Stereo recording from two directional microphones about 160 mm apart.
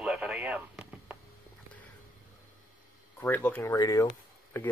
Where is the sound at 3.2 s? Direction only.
15° left (ahead or behind).